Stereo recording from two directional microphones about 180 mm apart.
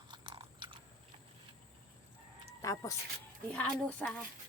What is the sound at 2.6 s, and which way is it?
Speech, 15° left (ahead or behind).